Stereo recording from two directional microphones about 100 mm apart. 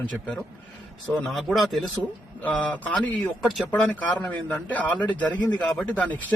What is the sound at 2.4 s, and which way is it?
A man's voice, 15° left (ahead or behind).